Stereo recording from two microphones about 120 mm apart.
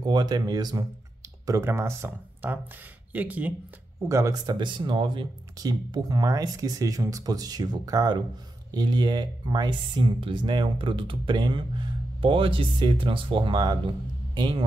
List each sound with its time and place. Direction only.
0.0 s speech: 35° right (ahead or behind); by 3.5 s 15° right (ahead or behind)
4.0 s speech: 25° right (ahead or behind)
4.5 s speech: 40° right (ahead or behind)